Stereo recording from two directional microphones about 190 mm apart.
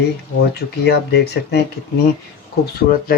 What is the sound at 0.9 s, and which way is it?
Speech, 60° left (ahead or behind).